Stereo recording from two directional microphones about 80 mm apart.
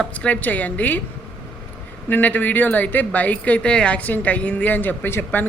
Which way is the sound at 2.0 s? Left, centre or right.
Left.